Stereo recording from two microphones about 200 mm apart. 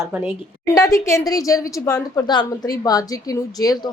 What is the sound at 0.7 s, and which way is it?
Speech, 15° left (ahead or behind).